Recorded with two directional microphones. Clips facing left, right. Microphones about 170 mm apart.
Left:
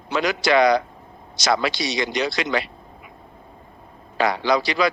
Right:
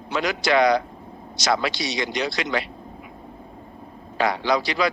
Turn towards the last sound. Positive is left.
turn(degrees=90)